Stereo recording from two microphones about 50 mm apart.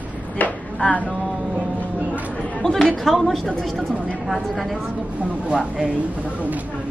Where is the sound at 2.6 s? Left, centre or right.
Centre.